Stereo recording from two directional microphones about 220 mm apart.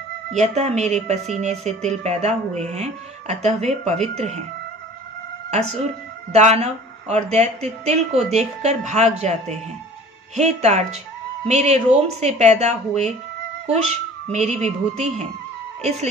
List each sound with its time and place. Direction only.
0.3 s speech: 30° right (ahead or behind)
5.5 s speech: 30° right (ahead or behind)